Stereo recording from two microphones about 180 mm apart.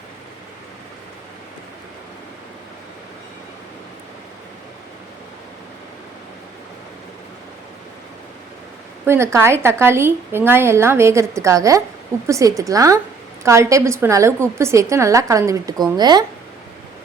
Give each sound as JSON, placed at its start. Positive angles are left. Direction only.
{"t": 9.0, "sound": "a woman's voice", "side_deg": -15}